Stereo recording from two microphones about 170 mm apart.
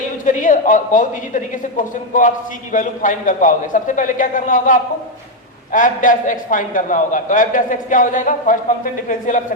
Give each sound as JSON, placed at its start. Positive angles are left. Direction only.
{"t": 0.3, "sound": "a man's voice", "side_deg": 50}